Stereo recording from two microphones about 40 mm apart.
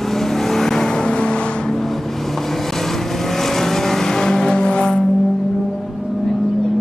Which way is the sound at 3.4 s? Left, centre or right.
Centre.